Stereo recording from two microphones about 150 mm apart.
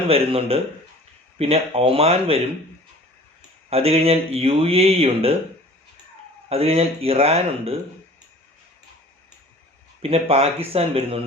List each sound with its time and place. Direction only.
0.1 s speech: 40° right (ahead or behind)
3.7 s speech: 40° right (ahead or behind)
6.5 s speech: 40° right (ahead or behind)
10.0 s speech: 40° right (ahead or behind)